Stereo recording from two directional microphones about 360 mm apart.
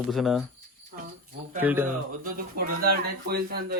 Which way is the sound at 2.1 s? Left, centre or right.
Right.